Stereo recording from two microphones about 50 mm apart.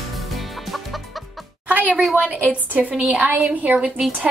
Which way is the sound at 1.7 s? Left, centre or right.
Right.